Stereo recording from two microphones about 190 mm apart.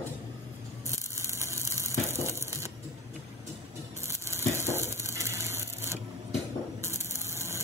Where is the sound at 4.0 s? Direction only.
15° right (ahead or behind).